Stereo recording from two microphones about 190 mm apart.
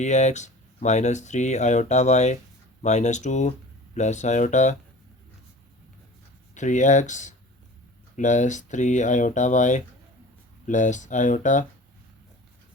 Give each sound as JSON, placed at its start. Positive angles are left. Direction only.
{"t": 0.0, "sound": "speech", "side_deg": 40}
{"t": 6.5, "sound": "speech", "side_deg": 40}